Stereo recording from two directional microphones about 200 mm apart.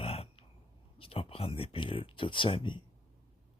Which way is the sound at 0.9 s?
25° left (ahead or behind).